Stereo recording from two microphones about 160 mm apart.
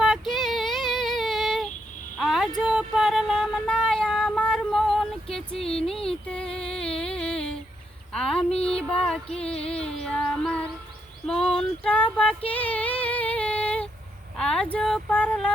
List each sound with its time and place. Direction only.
0.0 s female singing: centre (ahead or behind)
2.1 s a sound: centre (ahead or behind)
2.6 s child singing: 5° right (ahead or behind)
5.5 s speech: 35° left (ahead or behind)
6.1 s a sound: 5° left (ahead or behind)
12.5 s female singing: 10° left (ahead or behind)
14.3 s speech: 5° left (ahead or behind)